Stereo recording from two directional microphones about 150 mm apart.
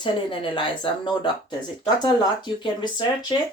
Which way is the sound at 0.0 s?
35° left (ahead or behind).